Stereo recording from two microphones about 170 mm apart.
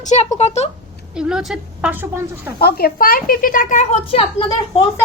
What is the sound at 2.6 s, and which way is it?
A woman's voice, 65° left (ahead or behind).